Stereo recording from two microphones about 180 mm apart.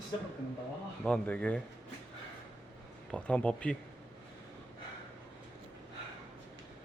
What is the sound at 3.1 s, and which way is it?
Speech, 5° left (ahead or behind).